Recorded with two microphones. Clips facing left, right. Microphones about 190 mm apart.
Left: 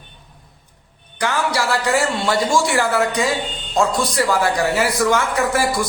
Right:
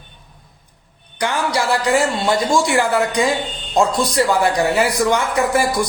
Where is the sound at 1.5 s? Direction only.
20° right (ahead or behind).